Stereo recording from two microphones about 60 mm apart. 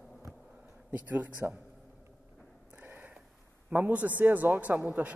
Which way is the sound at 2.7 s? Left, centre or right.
Right.